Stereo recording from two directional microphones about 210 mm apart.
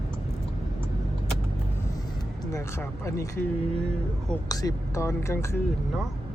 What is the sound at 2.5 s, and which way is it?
Speech, 15° left (ahead or behind).